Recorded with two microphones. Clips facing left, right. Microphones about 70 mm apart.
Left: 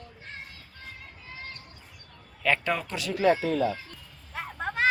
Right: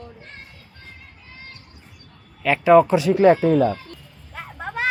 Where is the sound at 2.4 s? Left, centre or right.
Centre.